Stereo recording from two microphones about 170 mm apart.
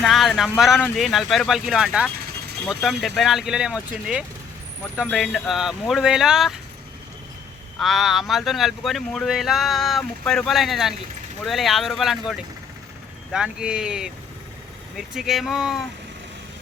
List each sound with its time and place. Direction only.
0.0 s speech: centre (ahead or behind)
7.8 s speech: centre (ahead or behind)
13.3 s speech: 5° right (ahead or behind)